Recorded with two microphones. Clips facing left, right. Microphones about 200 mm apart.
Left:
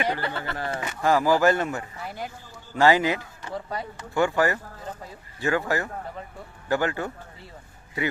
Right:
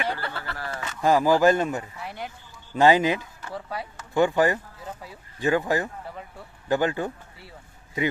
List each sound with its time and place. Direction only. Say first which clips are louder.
0.0 s speech: left 3 dB; 15° left (ahead or behind)
1.0 s speech: right 1 dB; 15° right (ahead or behind)
2.0 s speech: left 1 dB; centre (ahead or behind)
2.7 s speech: right 1 dB; 20° right (ahead or behind)
3.5 s speech: left 2 dB; 5° right (ahead or behind)
4.1 s speech: right 2 dB; 20° right (ahead or behind)